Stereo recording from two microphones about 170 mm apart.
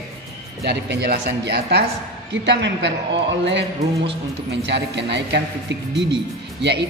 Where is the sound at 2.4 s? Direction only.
90° right.